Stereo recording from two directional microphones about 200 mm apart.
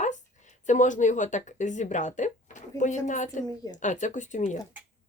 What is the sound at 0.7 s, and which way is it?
A woman's voice, 40° left (ahead or behind).